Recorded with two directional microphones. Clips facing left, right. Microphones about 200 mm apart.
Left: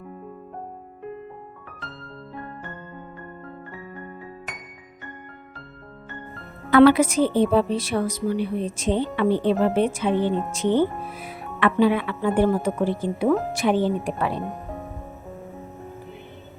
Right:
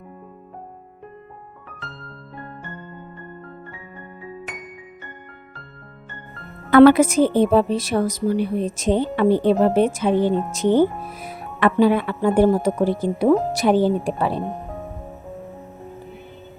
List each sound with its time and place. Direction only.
2.3 s music: centre (ahead or behind)
6.7 s a woman's voice: 50° right (ahead or behind); by 14.4 s 30° right (ahead or behind)